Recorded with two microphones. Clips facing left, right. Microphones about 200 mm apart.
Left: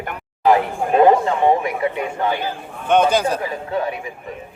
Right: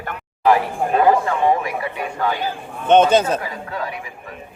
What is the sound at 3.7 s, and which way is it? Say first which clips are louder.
Speech: left 6 dB; 25° left (ahead or behind).